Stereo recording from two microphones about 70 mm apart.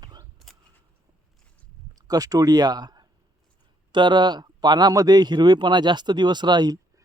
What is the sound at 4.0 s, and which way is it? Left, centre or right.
Speech, right.